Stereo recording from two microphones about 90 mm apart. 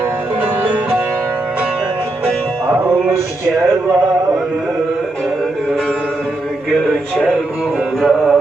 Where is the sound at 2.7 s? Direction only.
15° right (ahead or behind).